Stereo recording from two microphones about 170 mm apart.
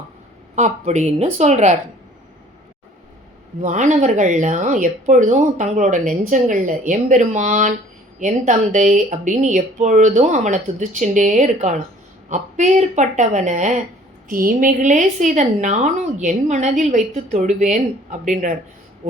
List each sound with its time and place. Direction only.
0.5 s a woman's voice: 45° right (ahead or behind)
3.6 s a woman's voice: 45° right (ahead or behind)